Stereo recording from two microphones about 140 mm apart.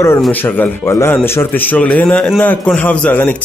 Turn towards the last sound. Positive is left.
turn(degrees=10)  # may be behind; listen again after turning